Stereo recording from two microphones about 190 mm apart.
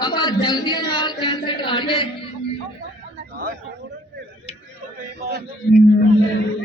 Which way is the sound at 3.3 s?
55° right (ahead or behind).